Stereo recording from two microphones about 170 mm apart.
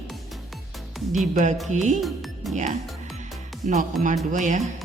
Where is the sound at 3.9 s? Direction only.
Centre (ahead or behind).